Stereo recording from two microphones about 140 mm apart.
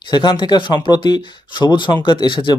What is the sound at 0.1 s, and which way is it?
Speech, 35° left (ahead or behind).